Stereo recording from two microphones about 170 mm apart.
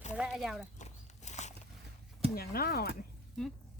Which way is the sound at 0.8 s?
45° left (ahead or behind).